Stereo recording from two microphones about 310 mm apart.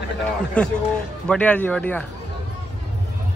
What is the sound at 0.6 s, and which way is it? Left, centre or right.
Speech, centre.